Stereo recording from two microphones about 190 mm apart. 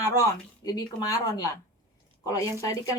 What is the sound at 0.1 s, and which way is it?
Speech, 20° left (ahead or behind).